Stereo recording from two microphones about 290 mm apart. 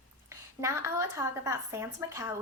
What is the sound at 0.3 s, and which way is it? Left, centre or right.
A woman's voice, centre.